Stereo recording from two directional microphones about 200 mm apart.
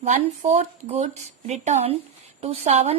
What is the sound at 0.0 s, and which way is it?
Speech, 35° right (ahead or behind).